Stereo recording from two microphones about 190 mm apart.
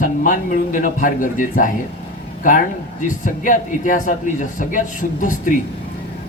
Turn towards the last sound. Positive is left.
turn(degrees=45)  # may be behind; listen again after turning